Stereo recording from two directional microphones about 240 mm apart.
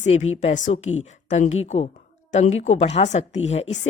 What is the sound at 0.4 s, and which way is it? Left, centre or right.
Speech, left.